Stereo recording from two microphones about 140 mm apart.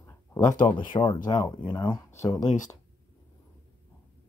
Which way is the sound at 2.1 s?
20° left (ahead or behind).